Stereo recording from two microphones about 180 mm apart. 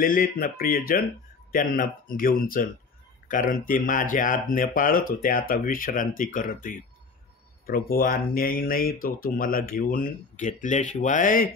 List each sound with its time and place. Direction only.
0.0 s speech: 55° left (ahead or behind)